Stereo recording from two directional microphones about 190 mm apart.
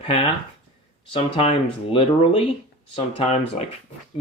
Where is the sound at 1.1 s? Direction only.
35° left (ahead or behind).